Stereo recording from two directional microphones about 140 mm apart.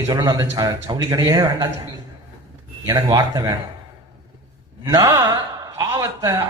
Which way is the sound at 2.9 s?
25° right (ahead or behind).